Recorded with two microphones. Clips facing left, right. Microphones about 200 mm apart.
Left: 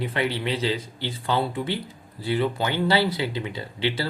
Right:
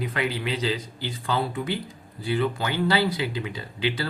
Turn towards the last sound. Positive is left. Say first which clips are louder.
# left 1 dB
turn(degrees=25)  # may be behind; listen again after turning